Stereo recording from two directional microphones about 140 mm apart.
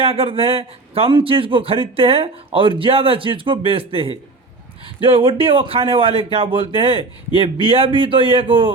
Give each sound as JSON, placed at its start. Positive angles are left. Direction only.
{"t": 0.0, "sound": "a man's voice", "side_deg": -40}